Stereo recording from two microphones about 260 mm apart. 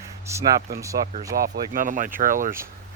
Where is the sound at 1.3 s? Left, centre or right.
Right.